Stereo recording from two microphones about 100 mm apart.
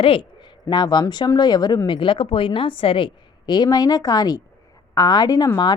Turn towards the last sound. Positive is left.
turn(degrees=40)  # may be behind; listen again after turning